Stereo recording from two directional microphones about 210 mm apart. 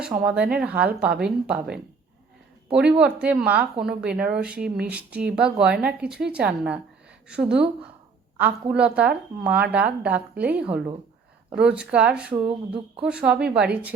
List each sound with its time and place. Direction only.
0.1 s a woman's voice: 5° right (ahead or behind)
3.0 s a woman's voice: 5° right (ahead or behind)